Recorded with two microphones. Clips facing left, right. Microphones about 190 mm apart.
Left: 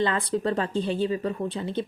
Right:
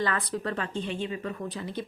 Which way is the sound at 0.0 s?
25° left (ahead or behind).